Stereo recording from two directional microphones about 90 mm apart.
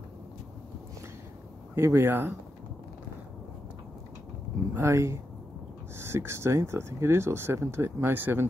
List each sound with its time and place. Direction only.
1.8 s speech: 25° right (ahead or behind)
4.7 s speech: 30° right (ahead or behind)